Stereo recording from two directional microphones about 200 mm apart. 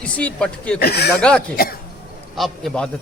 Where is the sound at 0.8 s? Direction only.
55° left (ahead or behind).